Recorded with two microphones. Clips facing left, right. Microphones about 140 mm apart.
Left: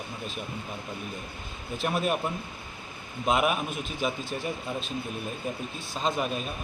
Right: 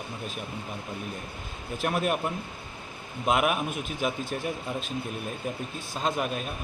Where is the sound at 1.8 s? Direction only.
5° right (ahead or behind).